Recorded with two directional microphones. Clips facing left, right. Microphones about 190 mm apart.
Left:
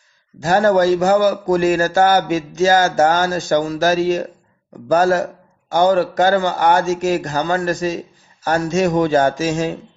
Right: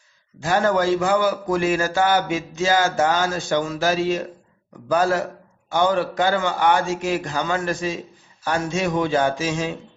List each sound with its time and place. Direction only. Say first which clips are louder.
0.4 s a man's voice: left 6 dB; 40° left (ahead or behind)